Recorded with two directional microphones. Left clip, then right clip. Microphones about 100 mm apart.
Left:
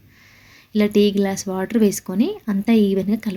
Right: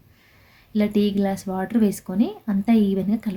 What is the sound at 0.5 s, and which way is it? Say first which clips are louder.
Speech: left 5 dB; 25° left (ahead or behind).